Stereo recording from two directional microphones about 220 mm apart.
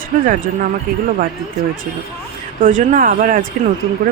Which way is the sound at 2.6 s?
35° right (ahead or behind).